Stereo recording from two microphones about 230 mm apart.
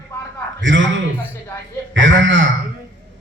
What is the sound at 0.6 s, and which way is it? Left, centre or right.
Speech, right.